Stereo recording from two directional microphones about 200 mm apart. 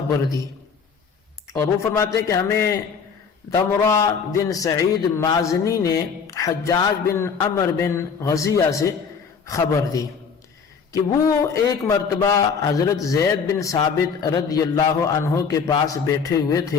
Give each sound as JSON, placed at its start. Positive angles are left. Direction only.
{"t": 2.1, "sound": "speech", "side_deg": 15}